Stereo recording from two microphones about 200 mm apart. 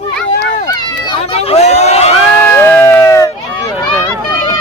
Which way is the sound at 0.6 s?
25° left (ahead or behind).